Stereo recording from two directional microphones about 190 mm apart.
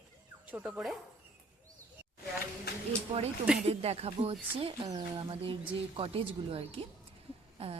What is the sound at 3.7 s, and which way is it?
A woman's voice, 30° right (ahead or behind).